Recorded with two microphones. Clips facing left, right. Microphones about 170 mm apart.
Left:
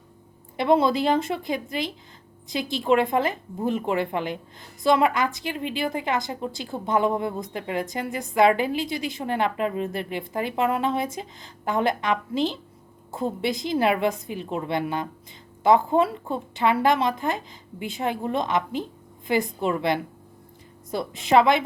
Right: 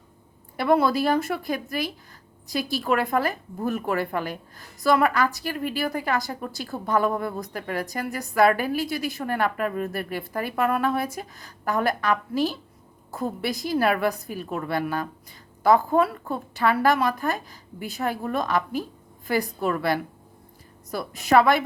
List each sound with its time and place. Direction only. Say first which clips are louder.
0.5 s a woman's voice: left 1 dB; 20° left (ahead or behind)